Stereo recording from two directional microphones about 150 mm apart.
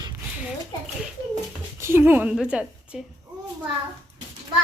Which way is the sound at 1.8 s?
15° right (ahead or behind).